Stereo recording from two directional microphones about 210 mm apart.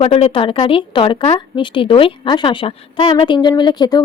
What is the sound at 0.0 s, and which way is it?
A woman's voice, 30° left (ahead or behind).